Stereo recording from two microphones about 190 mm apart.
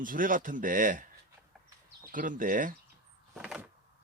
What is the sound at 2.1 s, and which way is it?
Speech, 45° right (ahead or behind).